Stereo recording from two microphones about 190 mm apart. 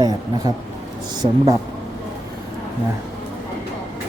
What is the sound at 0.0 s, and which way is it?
Speech, 20° right (ahead or behind).